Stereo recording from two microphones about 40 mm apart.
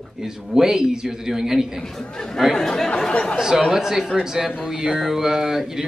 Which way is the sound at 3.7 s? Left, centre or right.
Centre.